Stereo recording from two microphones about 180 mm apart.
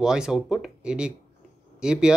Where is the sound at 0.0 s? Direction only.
5° right (ahead or behind).